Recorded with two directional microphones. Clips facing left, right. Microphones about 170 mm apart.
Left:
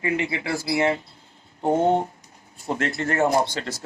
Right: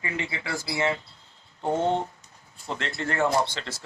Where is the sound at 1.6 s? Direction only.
45° left (ahead or behind).